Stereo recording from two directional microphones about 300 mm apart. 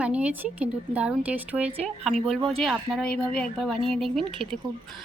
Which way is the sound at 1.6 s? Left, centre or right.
Right.